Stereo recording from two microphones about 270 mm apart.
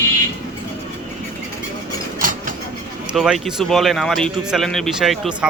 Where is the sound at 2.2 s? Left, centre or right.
Right.